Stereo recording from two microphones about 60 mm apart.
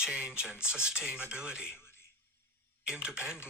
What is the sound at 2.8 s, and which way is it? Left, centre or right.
Speech, centre.